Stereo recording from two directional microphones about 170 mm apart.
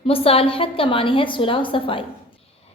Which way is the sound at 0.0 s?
35° left (ahead or behind).